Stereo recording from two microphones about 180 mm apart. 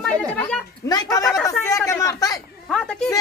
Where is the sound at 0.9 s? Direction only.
20° left (ahead or behind).